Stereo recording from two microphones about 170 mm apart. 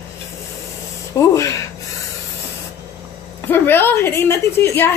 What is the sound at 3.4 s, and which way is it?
A woman's voice, 10° left (ahead or behind).